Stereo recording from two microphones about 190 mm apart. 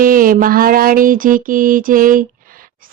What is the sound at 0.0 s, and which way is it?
Mantra, 45° right (ahead or behind).